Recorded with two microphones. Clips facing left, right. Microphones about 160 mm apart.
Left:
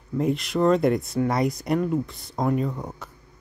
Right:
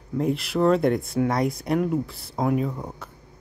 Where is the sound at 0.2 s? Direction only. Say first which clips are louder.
Even; centre (ahead or behind).